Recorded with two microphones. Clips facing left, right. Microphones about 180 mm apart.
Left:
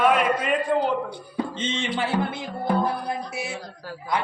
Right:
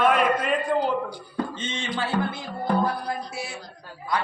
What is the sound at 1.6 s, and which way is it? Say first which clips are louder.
Speech: left 3 dB; 25° left (ahead or behind).